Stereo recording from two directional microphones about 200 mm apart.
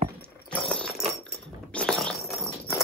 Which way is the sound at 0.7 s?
5° left (ahead or behind).